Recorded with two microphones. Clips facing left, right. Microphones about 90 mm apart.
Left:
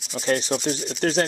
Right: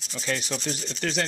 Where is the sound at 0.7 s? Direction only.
5° left (ahead or behind).